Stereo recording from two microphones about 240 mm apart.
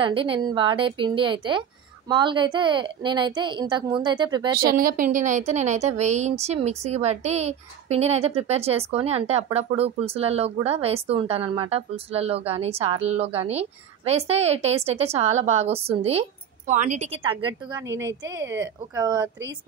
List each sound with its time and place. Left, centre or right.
0.0 s a woman's voice: right
4.6 s a woman's voice: right; by 19.3 s centre